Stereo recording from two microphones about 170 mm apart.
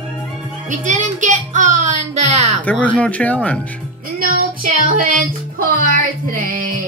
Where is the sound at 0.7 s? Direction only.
45° right (ahead or behind).